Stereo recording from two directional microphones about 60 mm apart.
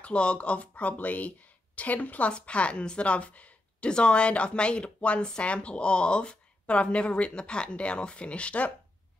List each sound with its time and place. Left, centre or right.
0.0 s speech: centre